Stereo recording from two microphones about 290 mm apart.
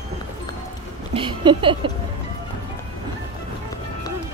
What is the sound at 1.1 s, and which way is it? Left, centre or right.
Speech, centre.